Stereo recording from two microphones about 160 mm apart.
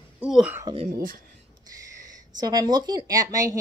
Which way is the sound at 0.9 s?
65° right (ahead or behind).